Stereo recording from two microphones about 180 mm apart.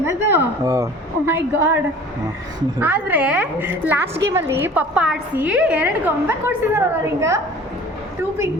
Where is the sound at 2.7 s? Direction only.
10° right (ahead or behind).